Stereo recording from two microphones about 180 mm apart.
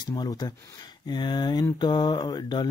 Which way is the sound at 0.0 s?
25° left (ahead or behind).